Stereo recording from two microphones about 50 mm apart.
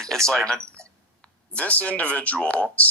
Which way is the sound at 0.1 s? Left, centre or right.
Centre.